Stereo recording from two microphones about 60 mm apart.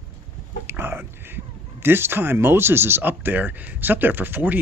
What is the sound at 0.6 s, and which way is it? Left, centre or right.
Speech, right.